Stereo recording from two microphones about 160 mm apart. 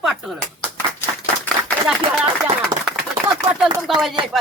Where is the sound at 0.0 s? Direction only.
Centre (ahead or behind).